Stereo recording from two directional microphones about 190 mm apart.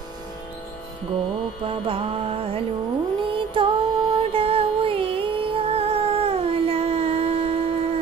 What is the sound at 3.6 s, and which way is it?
Music, 25° right (ahead or behind).